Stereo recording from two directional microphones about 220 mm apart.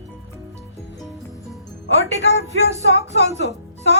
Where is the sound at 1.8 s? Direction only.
50° left (ahead or behind).